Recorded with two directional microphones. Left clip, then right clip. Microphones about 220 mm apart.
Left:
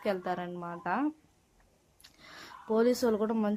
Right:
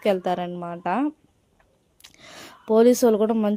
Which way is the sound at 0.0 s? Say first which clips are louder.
Right 10 dB; 35° right (ahead or behind).